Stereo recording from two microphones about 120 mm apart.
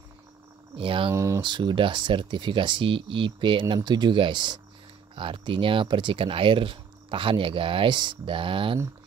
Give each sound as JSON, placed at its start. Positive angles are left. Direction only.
{"t": 0.7, "sound": "speech", "side_deg": -45}
{"t": 1.1, "sound": "speech", "side_deg": -25}
{"t": 1.4, "sound": "speech", "side_deg": -40}